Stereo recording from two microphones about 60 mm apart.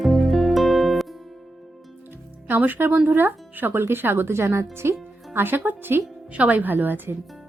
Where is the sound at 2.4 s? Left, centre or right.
Right.